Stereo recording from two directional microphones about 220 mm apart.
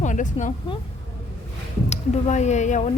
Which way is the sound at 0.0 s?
35° left (ahead or behind).